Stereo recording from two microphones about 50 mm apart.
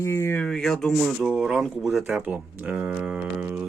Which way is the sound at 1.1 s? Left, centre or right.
Centre.